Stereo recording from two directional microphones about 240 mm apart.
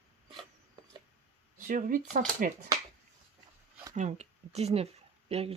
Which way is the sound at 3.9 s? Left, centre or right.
Right.